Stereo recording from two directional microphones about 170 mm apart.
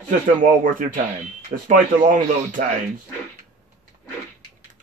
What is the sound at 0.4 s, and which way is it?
Speech, 50° right (ahead or behind).